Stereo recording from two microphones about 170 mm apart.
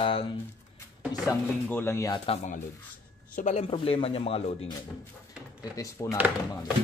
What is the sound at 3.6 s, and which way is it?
Speech, 35° left (ahead or behind).